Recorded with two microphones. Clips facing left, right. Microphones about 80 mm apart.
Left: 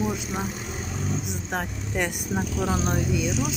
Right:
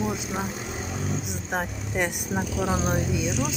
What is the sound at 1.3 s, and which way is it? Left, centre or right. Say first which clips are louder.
Speech: right 1 dB; centre.